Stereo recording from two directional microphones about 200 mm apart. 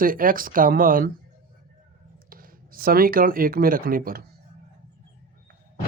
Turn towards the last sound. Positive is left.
turn(degrees=-45)  # may be behind; listen again after turning